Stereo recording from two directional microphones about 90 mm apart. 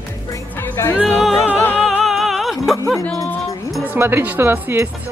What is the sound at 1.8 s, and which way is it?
Music, centre (ahead or behind).